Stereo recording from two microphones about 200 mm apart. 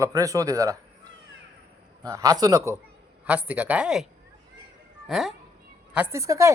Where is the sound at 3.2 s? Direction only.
10° right (ahead or behind).